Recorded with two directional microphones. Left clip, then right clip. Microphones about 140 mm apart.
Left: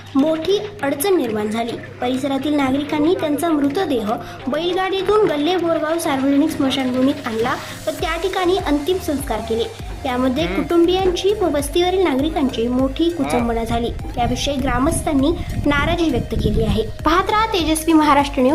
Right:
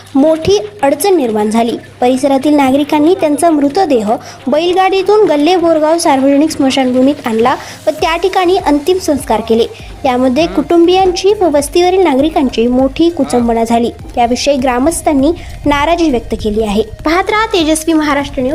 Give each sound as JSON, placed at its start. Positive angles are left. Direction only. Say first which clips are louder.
{"t": 0.4, "sound": "a woman's voice", "louder": "right 9 dB", "side_deg": -40}
{"t": 17.8, "sound": "a woman's voice", "louder": "right 2 dB", "side_deg": -20}
{"t": 18.2, "sound": "a woman's voice", "louder": "right 1 dB", "side_deg": 0}